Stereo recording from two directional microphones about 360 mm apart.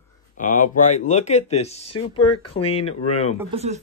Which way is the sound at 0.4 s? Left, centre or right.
Left.